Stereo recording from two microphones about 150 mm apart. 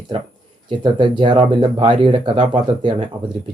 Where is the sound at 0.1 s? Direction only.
35° right (ahead or behind).